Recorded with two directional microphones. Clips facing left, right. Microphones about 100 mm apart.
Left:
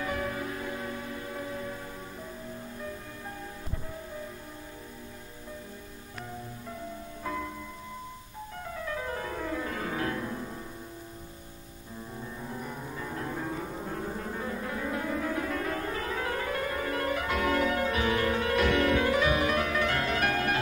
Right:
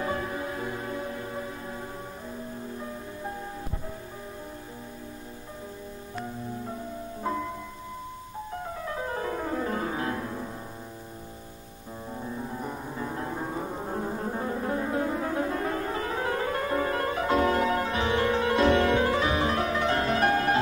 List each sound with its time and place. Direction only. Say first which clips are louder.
7.3 s music: right 4 dB; 25° right (ahead or behind)
8.8 s music: right 2 dB; 30° right (ahead or behind)
12.6 s music: right 4 dB; 30° right (ahead or behind)